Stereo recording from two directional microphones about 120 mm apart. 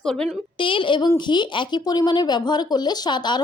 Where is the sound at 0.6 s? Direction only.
45° left (ahead or behind).